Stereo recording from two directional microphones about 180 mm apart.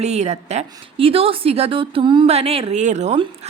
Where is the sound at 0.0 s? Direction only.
40° right (ahead or behind).